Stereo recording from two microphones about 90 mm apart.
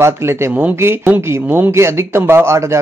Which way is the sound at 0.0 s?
30° right (ahead or behind).